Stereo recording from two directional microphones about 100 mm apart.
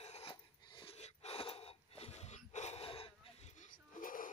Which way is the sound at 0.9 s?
85° left.